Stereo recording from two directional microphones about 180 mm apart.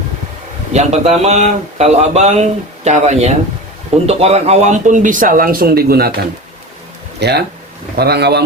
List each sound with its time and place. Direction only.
0.7 s speech: 40° right (ahead or behind); by 8.4 s 65° right (ahead or behind)